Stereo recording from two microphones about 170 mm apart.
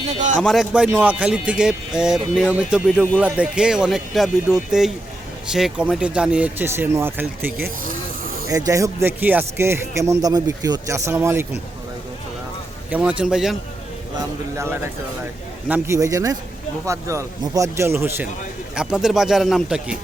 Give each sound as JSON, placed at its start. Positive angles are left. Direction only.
{"t": 0.3, "sound": "speech", "side_deg": 0}
{"t": 12.9, "sound": "speech", "side_deg": -10}
{"t": 15.7, "sound": "a man's voice", "side_deg": -15}